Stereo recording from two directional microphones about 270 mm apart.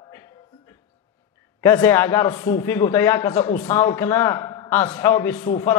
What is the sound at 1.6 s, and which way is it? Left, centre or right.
A man's voice, centre.